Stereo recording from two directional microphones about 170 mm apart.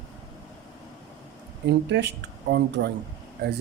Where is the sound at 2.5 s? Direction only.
80° right.